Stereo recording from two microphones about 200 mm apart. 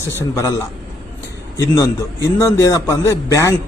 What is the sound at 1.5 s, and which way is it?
A man's voice, 15° left (ahead or behind).